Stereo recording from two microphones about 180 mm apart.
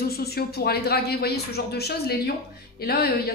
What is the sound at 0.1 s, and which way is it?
Speech, 60° left (ahead or behind).